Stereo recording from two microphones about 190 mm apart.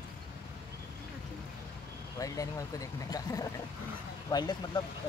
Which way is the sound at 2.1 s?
15° left (ahead or behind).